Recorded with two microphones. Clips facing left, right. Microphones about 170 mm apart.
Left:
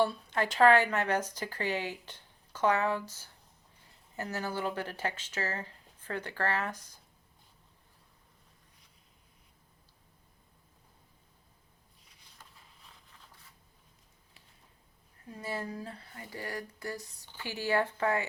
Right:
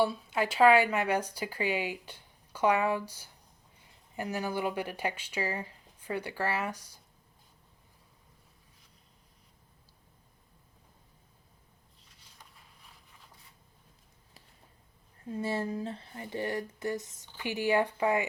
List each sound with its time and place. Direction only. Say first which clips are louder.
0.0 s speech: right 1 dB; 10° right (ahead or behind)
15.2 s speech: right 6 dB; 25° right (ahead or behind)